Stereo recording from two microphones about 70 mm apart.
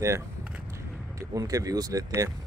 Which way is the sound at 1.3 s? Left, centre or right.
Right.